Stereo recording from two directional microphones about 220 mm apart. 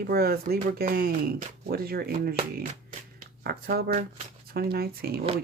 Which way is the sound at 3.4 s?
45° right (ahead or behind).